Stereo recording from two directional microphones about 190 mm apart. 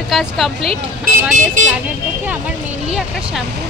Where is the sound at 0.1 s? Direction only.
Centre (ahead or behind).